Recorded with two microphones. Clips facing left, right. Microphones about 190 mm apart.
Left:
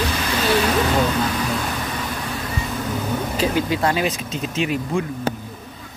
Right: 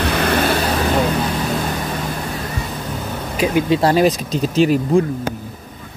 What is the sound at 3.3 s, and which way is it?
Speech, 15° right (ahead or behind).